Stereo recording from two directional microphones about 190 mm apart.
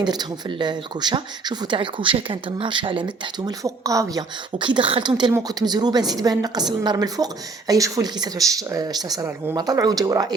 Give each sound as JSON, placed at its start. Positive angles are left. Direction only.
{"t": 0.0, "sound": "speech", "side_deg": -20}